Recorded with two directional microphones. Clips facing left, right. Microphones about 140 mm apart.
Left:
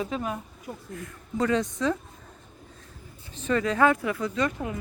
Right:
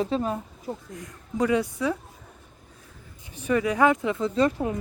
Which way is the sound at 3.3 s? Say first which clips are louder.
Right 1 dB; 10° right (ahead or behind).